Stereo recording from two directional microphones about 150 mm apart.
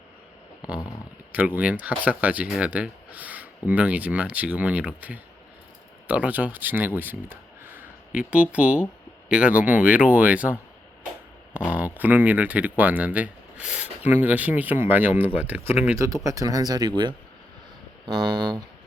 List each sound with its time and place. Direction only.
1.3 s speech: 10° right (ahead or behind)
11.7 s speech: 10° right (ahead or behind); by 16.9 s 25° right (ahead or behind)
18.0 s speech: 30° right (ahead or behind)